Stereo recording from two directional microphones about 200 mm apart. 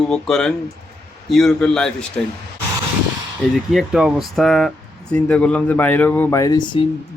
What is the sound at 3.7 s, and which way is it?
A man's voice, 5° right (ahead or behind).